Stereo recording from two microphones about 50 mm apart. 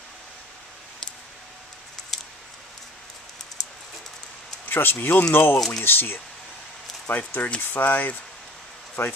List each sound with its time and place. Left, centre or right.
2.0 s a sound: centre
4.6 s speech: left
5.3 s speech: left
7.1 s speech: left
9.0 s speech: left